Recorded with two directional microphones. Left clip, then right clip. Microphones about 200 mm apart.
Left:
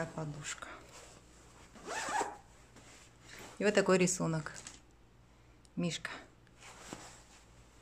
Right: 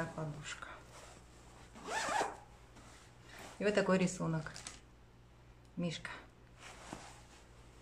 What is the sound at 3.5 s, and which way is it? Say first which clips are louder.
Speech: left 4 dB; 50° left (ahead or behind).